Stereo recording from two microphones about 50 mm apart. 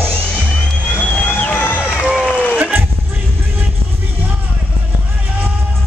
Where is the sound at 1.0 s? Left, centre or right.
Left.